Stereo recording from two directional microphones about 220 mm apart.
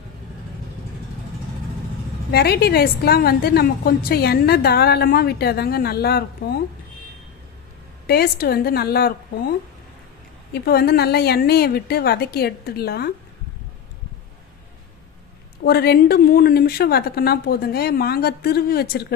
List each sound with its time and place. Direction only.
2.3 s a woman's voice: 45° left (ahead or behind)
8.0 s a woman's voice: 45° left (ahead or behind)
15.6 s a woman's voice: 45° left (ahead or behind)